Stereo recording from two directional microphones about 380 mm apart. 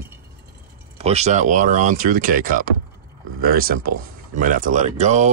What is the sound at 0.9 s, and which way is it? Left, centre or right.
Speech, centre.